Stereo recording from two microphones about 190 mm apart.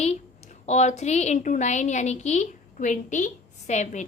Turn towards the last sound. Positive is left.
turn(degrees=40)  # may be behind; listen again after turning